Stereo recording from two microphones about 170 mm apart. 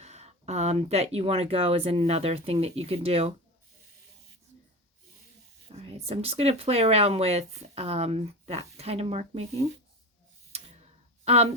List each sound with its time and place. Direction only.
0.0 s speech: 40° right (ahead or behind)
5.6 s speech: 35° right (ahead or behind)
10.5 s tick: 40° right (ahead or behind)